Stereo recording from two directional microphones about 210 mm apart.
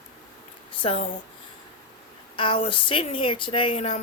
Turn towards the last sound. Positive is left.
turn(degrees=30)  # may be behind; listen again after turning